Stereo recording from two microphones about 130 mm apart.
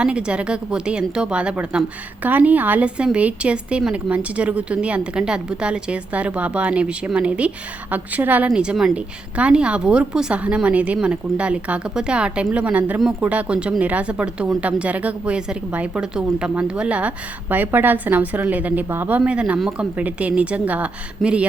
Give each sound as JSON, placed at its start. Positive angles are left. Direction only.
{"t": 0.0, "sound": "a woman's voice", "side_deg": -10}